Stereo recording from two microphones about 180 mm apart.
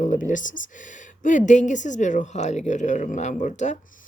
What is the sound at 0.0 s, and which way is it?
Speech, 45° left (ahead or behind).